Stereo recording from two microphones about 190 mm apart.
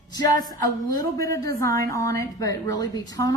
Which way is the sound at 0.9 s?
15° left (ahead or behind).